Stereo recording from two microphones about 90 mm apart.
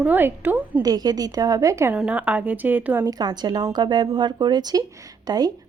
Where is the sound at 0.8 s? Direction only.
45° right (ahead or behind).